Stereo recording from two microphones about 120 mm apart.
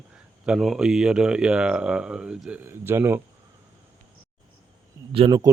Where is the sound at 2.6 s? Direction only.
20° right (ahead or behind).